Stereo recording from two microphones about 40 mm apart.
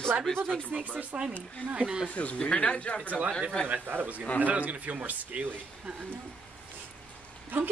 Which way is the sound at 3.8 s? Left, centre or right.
Right.